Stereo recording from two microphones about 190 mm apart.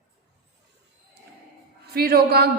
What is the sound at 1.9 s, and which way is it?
Speech, 55° right (ahead or behind).